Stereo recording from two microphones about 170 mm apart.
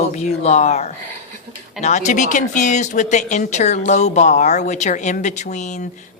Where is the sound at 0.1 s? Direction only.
40° left (ahead or behind).